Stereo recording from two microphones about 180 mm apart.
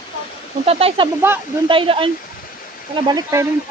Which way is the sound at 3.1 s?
20° right (ahead or behind).